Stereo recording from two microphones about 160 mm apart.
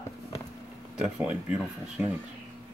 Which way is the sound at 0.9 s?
5° right (ahead or behind).